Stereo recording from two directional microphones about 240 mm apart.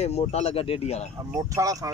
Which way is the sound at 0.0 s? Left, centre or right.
Left.